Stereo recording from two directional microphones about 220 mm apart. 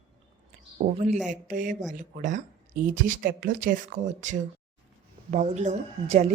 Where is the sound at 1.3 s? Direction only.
35° right (ahead or behind).